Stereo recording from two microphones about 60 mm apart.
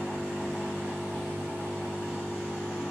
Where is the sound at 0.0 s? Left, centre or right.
Centre.